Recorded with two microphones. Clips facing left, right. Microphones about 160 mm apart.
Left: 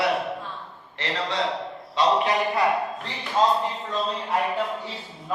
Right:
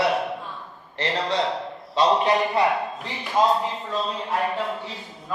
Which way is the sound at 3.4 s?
15° right (ahead or behind).